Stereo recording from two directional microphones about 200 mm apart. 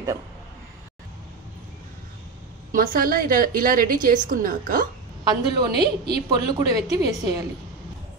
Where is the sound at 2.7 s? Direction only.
45° right (ahead or behind).